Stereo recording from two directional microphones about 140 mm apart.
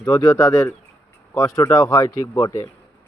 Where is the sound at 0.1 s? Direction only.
25° left (ahead or behind).